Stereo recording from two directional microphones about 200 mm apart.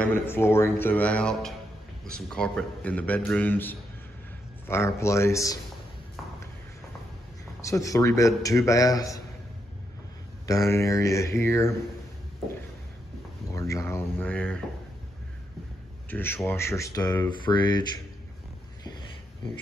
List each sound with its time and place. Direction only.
0.0 s a man's voice: 10° left (ahead or behind)
7.6 s a man's voice: 15° left (ahead or behind)
10.4 s a man's voice: 15° left (ahead or behind)
13.5 s a sound: 15° left (ahead or behind)
16.1 s a man's voice: 10° left (ahead or behind)